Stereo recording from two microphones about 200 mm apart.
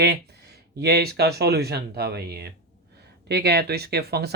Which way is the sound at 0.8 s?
55° right (ahead or behind).